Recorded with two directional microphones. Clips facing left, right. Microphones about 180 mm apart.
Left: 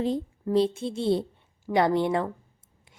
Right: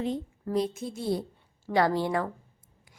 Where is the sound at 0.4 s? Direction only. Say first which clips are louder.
Left 5 dB; 30° left (ahead or behind).